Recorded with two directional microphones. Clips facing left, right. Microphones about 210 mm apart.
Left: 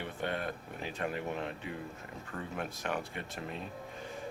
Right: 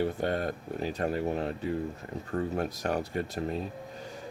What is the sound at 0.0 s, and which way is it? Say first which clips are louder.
Speech: right 8 dB; 40° right (ahead or behind).